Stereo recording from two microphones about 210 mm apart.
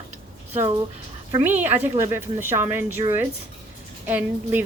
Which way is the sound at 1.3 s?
10° right (ahead or behind).